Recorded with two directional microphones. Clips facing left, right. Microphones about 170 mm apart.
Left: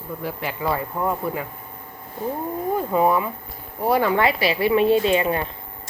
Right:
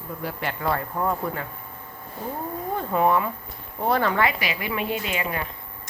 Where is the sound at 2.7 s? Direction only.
10° left (ahead or behind).